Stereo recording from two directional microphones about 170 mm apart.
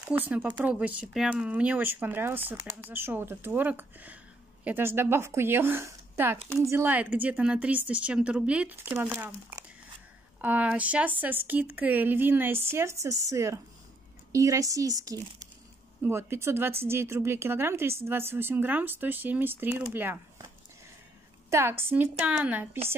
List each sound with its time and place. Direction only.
0.1 s speech: 10° right (ahead or behind)